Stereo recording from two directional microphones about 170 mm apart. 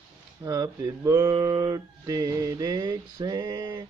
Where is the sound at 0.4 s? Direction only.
20° right (ahead or behind).